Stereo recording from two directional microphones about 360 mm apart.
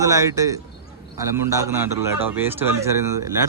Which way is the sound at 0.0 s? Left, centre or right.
Centre.